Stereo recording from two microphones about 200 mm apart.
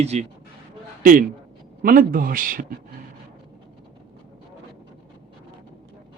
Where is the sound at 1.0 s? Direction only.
45° right (ahead or behind).